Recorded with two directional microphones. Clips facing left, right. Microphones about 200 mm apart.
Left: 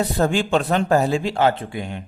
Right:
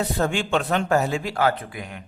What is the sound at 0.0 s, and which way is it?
A man's voice, 35° left (ahead or behind).